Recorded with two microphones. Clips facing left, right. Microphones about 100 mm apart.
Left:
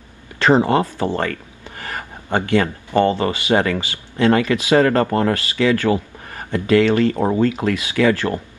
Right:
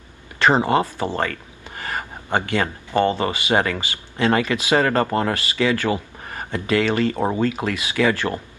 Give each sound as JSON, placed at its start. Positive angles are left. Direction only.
{"t": 0.4, "sound": "speech", "side_deg": -20}
{"t": 3.1, "sound": "speech", "side_deg": -20}